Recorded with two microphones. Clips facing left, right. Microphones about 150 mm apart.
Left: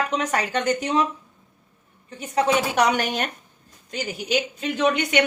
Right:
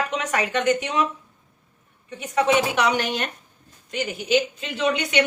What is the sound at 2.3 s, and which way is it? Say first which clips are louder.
Speech: right 1 dB; 40° left (ahead or behind).